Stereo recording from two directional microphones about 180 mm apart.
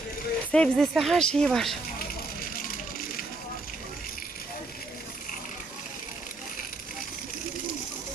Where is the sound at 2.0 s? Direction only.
55° left (ahead or behind).